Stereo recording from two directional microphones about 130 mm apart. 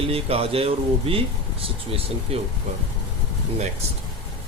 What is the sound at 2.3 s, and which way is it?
Speech, 50° right (ahead or behind).